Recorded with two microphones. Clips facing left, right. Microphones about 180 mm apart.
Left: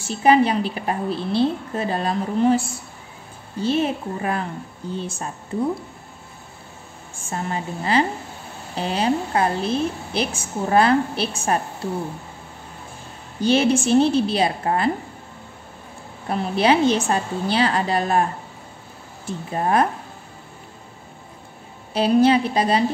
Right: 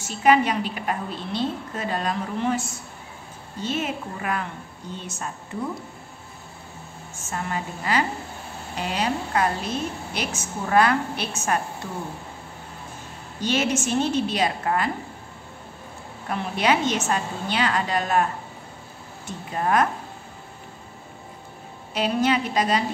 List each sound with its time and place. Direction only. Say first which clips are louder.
0.0 s a woman's voice: left 3 dB; 30° left (ahead or behind)
7.2 s a woman's voice: left 2 dB; 30° left (ahead or behind)
13.4 s a woman's voice: left 6 dB; 30° left (ahead or behind)
16.3 s a woman's voice: left 4 dB; 30° left (ahead or behind)
21.9 s a woman's voice: left 6 dB; 30° left (ahead or behind)